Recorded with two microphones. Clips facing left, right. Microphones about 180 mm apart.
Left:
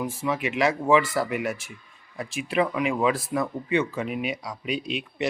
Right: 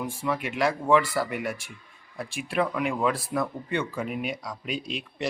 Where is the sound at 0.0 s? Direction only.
Centre (ahead or behind).